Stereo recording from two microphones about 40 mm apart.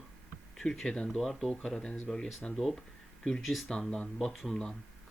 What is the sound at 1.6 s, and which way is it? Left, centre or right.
Speech, left.